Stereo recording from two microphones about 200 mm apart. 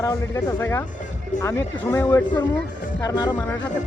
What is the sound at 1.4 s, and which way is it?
Speech, 15° left (ahead or behind).